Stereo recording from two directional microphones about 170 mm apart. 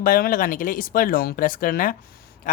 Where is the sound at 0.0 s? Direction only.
55° left (ahead or behind).